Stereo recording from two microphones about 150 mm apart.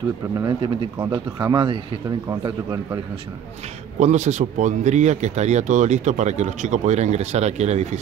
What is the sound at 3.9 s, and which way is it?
Speech, 50° right (ahead or behind).